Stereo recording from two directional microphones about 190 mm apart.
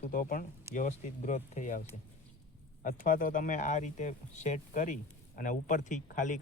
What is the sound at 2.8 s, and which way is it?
Speech, 45° left (ahead or behind).